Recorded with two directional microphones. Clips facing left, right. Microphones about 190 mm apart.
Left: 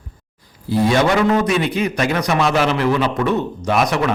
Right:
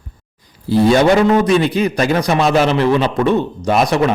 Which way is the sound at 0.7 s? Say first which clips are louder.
Right 4 dB; 30° right (ahead or behind).